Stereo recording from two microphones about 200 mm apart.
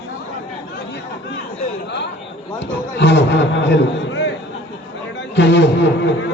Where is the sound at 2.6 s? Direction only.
60° left (ahead or behind).